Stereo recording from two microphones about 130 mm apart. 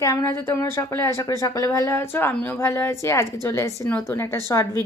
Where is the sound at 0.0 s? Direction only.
25° left (ahead or behind).